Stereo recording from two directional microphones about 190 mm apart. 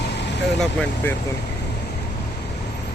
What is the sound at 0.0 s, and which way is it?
Vehicle, 65° left (ahead or behind).